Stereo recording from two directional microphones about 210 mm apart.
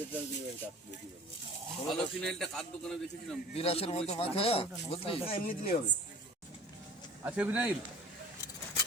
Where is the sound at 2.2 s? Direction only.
Centre (ahead or behind).